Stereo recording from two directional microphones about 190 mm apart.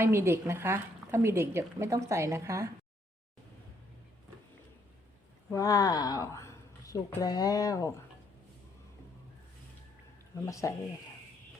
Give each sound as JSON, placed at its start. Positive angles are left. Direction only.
{"t": 0.0, "sound": "speech", "side_deg": -15}
{"t": 5.5, "sound": "a woman's voice", "side_deg": 20}
{"t": 10.4, "sound": "speech", "side_deg": 15}